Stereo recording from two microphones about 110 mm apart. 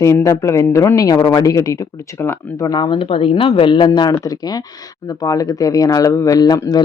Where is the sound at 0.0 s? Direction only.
30° left (ahead or behind).